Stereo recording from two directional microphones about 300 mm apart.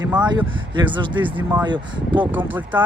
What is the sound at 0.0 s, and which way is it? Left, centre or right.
Speech, centre.